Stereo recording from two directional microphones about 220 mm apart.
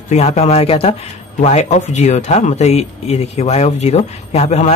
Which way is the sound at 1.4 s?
30° left (ahead or behind).